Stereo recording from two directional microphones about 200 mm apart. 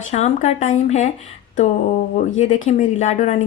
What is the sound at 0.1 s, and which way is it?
A woman's voice, 35° left (ahead or behind).